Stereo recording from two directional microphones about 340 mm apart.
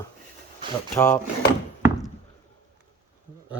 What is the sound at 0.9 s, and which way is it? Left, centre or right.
Speech, centre.